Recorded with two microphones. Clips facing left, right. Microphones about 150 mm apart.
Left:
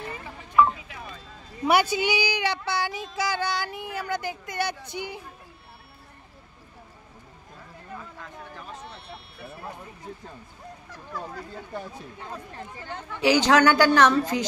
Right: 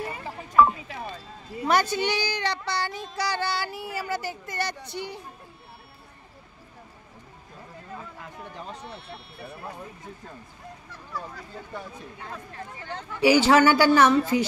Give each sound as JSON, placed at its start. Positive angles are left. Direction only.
{"t": 0.8, "sound": "a sound", "side_deg": -30}
{"t": 1.7, "sound": "speech", "side_deg": 10}
{"t": 8.8, "sound": "sheep", "side_deg": 0}
{"t": 13.2, "sound": "speech", "side_deg": -10}